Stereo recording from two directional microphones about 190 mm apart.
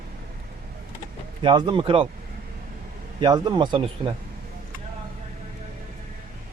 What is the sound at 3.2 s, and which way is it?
Speech, 25° right (ahead or behind).